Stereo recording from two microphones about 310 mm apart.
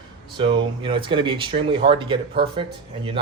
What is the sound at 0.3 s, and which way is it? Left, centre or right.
Speech, centre.